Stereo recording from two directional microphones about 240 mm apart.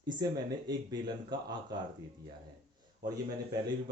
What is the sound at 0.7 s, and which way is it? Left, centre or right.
Speech, centre.